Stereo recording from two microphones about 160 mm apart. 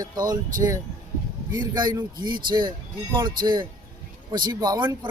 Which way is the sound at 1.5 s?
25° right (ahead or behind).